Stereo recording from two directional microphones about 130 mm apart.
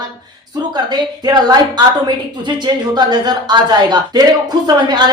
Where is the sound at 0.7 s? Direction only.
35° right (ahead or behind).